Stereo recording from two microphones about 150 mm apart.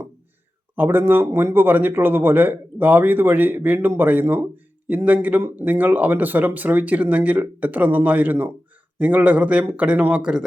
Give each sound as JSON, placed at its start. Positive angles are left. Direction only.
{"t": 0.8, "sound": "a man's voice", "side_deg": -15}